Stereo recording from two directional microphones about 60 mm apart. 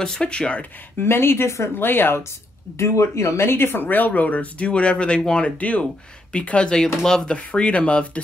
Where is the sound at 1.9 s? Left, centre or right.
Left.